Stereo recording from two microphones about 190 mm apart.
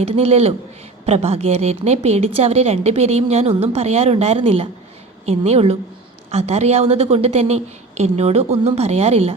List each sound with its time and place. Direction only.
0.0 s a woman's voice: 35° right (ahead or behind)